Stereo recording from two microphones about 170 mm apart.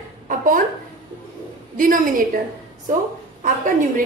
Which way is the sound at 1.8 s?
55° right (ahead or behind).